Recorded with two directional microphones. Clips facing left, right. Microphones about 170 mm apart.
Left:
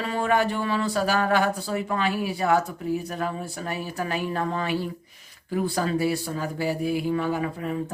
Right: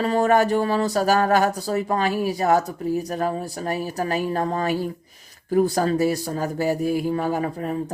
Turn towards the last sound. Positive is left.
turn(degrees=-40)  # may be behind; listen again after turning